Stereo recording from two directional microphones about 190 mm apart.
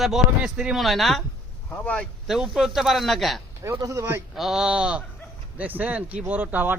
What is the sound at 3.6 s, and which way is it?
Speech, 15° right (ahead or behind).